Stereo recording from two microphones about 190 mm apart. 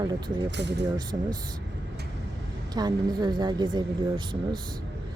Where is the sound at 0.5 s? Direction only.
65° right (ahead or behind).